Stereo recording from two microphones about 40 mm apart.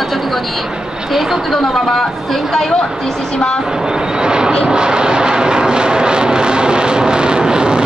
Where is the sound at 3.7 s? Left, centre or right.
Centre.